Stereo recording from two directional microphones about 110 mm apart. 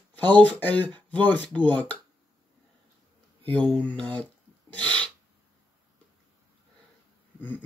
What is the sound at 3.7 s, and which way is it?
Speech, 15° left (ahead or behind).